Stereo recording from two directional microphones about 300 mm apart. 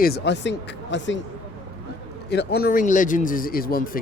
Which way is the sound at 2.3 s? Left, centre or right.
Left.